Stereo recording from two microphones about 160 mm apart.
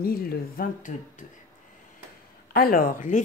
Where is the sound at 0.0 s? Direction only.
70° left (ahead or behind).